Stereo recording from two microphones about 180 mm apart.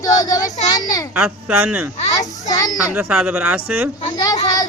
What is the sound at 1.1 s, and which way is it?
Speech, 10° right (ahead or behind).